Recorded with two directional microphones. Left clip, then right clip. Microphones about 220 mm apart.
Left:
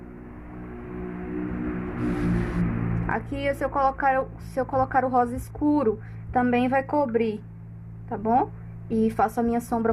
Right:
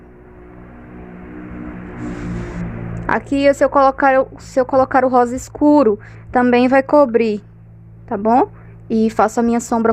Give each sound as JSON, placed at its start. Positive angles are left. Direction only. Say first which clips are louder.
{"t": 3.1, "sound": "a woman's voice", "louder": "right 13 dB", "side_deg": -50}